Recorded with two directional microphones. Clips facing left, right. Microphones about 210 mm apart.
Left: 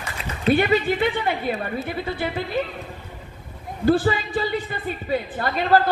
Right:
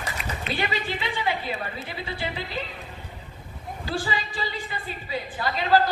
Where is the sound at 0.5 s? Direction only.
55° left (ahead or behind).